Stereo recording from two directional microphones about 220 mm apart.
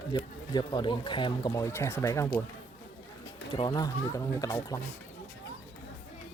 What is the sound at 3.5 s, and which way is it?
Speech, 20° left (ahead or behind).